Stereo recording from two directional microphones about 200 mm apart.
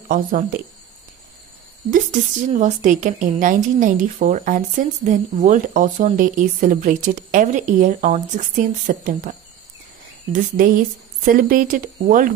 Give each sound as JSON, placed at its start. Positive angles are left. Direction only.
{"t": 0.1, "sound": "a woman's voice", "side_deg": -40}
{"t": 2.5, "sound": "a woman's voice", "side_deg": -40}
{"t": 10.3, "sound": "speech", "side_deg": -45}